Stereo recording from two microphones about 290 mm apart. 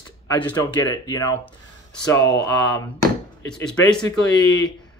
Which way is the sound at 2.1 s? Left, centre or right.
Centre.